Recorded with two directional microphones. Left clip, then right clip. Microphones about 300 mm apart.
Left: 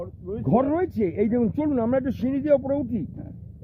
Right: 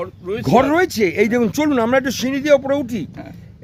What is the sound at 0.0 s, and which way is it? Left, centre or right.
Speech, right.